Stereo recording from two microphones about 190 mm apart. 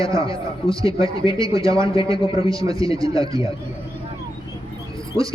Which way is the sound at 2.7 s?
20° right (ahead or behind).